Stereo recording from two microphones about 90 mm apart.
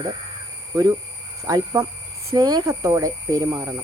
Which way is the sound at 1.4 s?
35° right (ahead or behind).